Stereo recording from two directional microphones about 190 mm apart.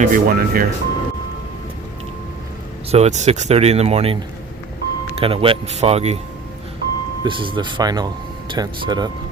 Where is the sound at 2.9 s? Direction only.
35° right (ahead or behind).